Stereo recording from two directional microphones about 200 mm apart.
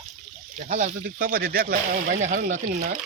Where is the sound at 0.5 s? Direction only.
35° right (ahead or behind).